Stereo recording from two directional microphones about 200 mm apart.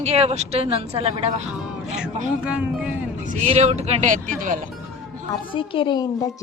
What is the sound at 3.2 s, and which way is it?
A woman's voice, 35° right (ahead or behind).